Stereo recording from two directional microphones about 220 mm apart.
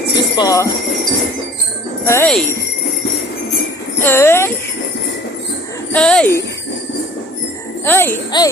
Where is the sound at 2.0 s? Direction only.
10° left (ahead or behind).